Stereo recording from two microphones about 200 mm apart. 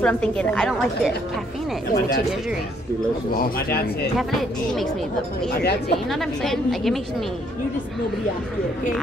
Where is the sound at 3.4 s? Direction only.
50° left (ahead or behind).